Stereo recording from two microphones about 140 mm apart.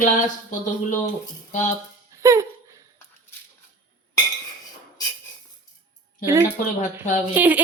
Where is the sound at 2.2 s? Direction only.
20° right (ahead or behind).